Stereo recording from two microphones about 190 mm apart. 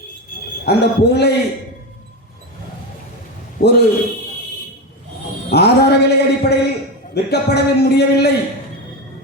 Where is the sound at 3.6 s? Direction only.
55° left (ahead or behind).